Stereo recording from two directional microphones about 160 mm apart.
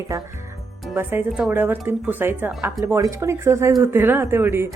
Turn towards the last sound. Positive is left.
turn(degrees=-15)  # may be behind; listen again after turning